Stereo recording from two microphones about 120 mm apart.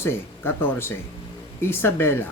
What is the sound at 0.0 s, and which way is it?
Speech, 20° left (ahead or behind).